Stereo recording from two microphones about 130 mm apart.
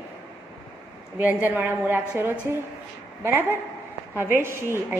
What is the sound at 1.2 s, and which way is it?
A woman's voice, 15° right (ahead or behind).